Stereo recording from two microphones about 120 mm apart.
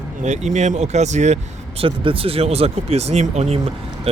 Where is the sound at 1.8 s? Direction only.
50° right (ahead or behind); by 3.6 s 65° right (ahead or behind).